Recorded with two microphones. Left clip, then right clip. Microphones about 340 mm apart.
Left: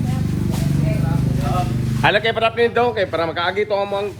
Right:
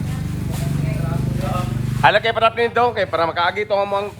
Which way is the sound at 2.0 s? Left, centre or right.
Centre.